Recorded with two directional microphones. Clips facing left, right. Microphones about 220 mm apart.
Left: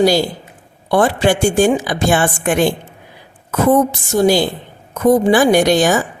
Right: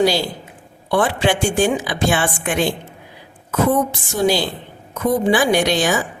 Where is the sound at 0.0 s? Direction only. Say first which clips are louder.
Left 4 dB; 45° left (ahead or behind).